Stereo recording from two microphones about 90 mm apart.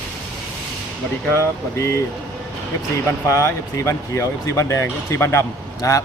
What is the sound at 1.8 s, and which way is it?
Speech, 30° left (ahead or behind).